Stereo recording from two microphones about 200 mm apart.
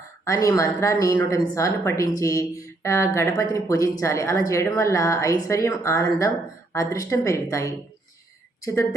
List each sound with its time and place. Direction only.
0.3 s speech: 15° left (ahead or behind)